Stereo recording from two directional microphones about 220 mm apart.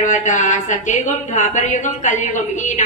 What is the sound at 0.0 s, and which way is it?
Speech, 35° left (ahead or behind).